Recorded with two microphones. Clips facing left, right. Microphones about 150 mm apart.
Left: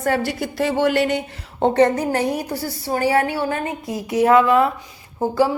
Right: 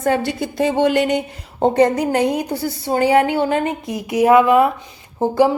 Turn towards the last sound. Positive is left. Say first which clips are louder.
# right 3 dB
turn(degrees=-20)  # may be behind; listen again after turning